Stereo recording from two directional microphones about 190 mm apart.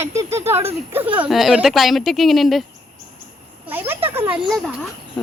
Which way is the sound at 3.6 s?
10° right (ahead or behind).